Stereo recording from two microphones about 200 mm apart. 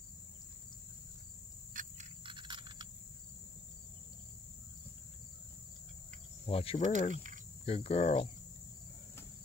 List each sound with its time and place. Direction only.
1.7 s cricket: 40° right (ahead or behind)
2.2 s a sound: 25° right (ahead or behind)
6.4 s speech: 30° left (ahead or behind)
6.9 s speech: 40° right (ahead or behind)
7.6 s cricket: 30° left (ahead or behind)